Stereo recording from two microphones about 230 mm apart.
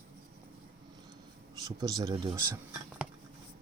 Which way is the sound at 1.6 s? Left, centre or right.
Centre.